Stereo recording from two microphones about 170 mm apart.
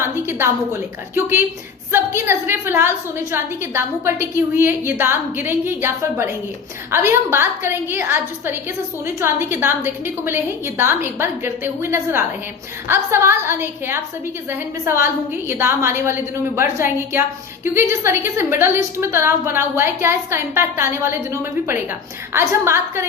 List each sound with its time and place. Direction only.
0.0 s a sound: 15° right (ahead or behind)
1.1 s a woman's voice: 15° right (ahead or behind)
22.3 s a woman's voice: 15° right (ahead or behind)